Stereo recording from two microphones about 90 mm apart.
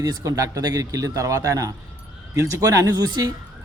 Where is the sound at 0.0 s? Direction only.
40° right (ahead or behind).